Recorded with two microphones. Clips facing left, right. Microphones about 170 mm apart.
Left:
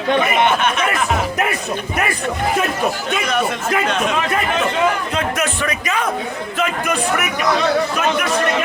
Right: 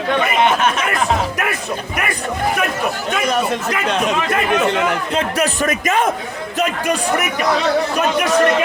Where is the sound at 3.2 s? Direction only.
35° right (ahead or behind).